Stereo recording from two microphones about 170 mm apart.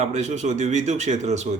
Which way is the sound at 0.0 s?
40° right (ahead or behind).